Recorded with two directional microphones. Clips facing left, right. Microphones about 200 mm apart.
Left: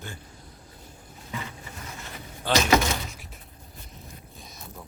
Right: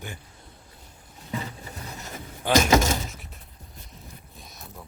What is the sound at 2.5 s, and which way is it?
Speech, 15° right (ahead or behind).